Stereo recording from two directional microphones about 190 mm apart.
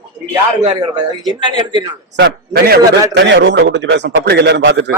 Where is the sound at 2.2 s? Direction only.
55° right (ahead or behind).